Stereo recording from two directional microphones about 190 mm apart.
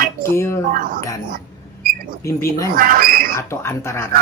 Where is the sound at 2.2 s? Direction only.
15° left (ahead or behind).